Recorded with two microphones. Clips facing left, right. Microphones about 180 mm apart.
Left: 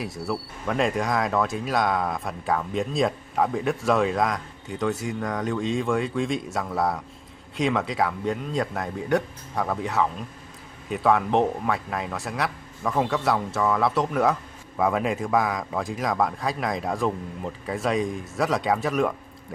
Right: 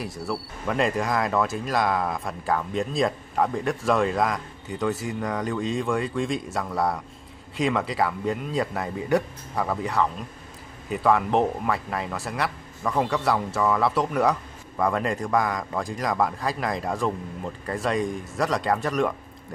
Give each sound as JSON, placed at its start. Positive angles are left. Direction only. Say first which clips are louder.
{"t": 0.0, "sound": "speech", "louder": "left 1 dB", "side_deg": 0}